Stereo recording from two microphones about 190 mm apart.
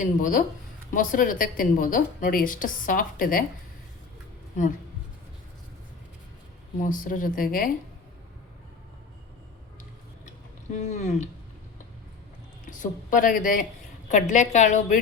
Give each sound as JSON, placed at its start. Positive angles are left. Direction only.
{"t": 0.0, "sound": "a woman's voice", "side_deg": 45}
{"t": 6.7, "sound": "a woman's voice", "side_deg": 45}
{"t": 10.8, "sound": "a woman's voice", "side_deg": 35}
{"t": 12.6, "sound": "a woman's voice", "side_deg": 45}